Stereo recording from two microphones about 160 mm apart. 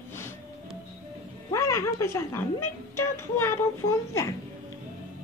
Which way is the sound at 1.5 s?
20° left (ahead or behind).